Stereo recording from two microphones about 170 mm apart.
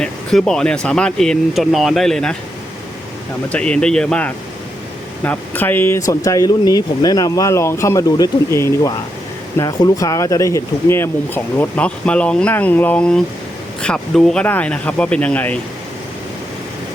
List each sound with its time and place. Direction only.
0.0 s speech: 5° left (ahead or behind)
3.5 s speech: 5° left (ahead or behind)